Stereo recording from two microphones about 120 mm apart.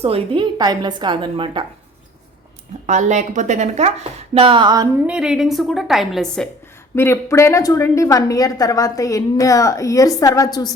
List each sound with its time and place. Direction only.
0.0 s a woman's voice: 55° right (ahead or behind)
0.6 s a woman's voice: 35° right (ahead or behind)
2.8 s speech: 90° right; by 4.4 s 65° right (ahead or behind)
4.4 s a woman's voice: 40° right (ahead or behind)
5.0 s a woman's voice: 5° right (ahead or behind)
6.9 s a woman's voice: 20° left (ahead or behind)